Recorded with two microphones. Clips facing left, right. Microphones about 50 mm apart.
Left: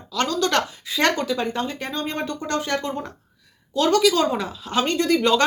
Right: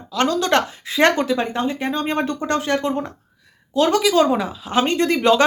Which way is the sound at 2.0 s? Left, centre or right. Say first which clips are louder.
Right 5 dB; right.